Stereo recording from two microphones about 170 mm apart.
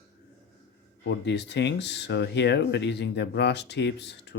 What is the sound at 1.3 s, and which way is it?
Speech, 90° left.